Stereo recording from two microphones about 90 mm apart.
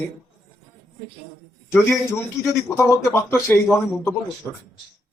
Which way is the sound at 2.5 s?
30° left (ahead or behind).